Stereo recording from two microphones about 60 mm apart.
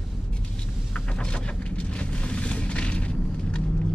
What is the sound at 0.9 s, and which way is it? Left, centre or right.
Vehicle, centre.